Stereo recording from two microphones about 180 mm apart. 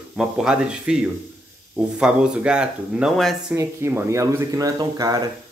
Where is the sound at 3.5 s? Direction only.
15° right (ahead or behind).